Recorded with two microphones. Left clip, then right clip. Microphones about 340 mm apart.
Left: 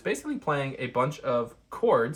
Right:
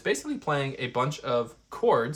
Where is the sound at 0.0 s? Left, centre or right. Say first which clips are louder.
Right 1 dB; centre.